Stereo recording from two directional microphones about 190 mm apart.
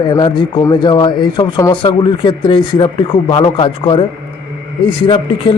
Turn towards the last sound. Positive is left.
turn(degrees=25)  # may be behind; listen again after turning